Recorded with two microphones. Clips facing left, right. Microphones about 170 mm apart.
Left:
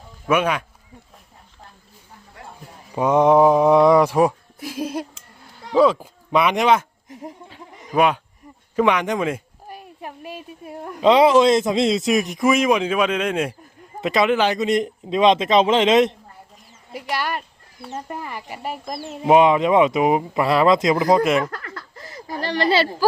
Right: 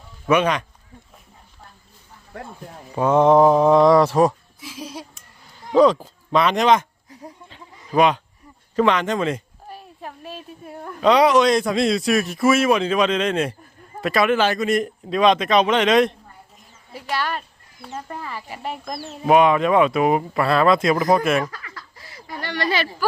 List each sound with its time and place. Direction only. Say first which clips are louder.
0.3 s speech: right 1 dB; 5° left (ahead or behind)
2.9 s speech: even; 10° left (ahead or behind)
4.6 s a sound: left 8 dB; 55° left (ahead or behind)
5.7 s speech: right 1 dB; 5° left (ahead or behind)
7.1 s a sound: left 5 dB; 20° left (ahead or behind)
7.9 s speech: right 1 dB; 10° left (ahead or behind)
16.9 s a child's voice: even; 10° left (ahead or behind)
19.2 s speech: left 1 dB; 25° left (ahead or behind)
21.5 s a sound: left 5 dB; 55° left (ahead or behind); by 22.9 s 30° left (ahead or behind)